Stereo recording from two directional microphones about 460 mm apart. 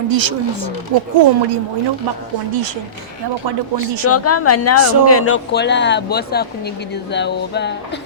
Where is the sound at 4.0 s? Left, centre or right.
Left.